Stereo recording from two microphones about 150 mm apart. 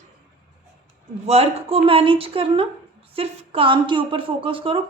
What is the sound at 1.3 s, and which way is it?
A woman's voice, 40° right (ahead or behind).